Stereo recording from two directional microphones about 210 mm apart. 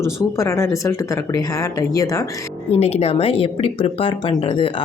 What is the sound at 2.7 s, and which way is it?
Speech, 30° left (ahead or behind).